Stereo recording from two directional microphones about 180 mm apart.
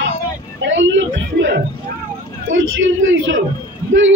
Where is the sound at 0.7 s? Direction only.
90° right.